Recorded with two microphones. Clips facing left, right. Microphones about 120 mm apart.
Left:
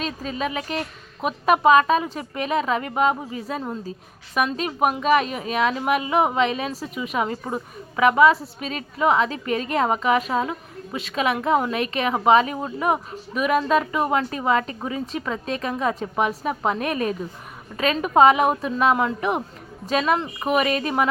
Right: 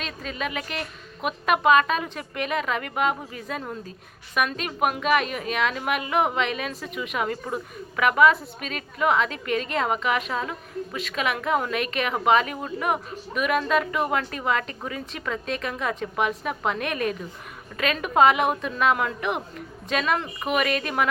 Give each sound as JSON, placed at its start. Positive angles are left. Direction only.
{"t": 0.0, "sound": "a woman's voice", "side_deg": 35}
{"t": 3.6, "sound": "a woman's voice", "side_deg": 20}
{"t": 4.4, "sound": "a woman's voice", "side_deg": 30}
{"t": 15.0, "sound": "a woman's voice", "side_deg": 35}